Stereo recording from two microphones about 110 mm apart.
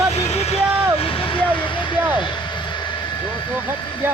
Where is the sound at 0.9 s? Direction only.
55° left (ahead or behind).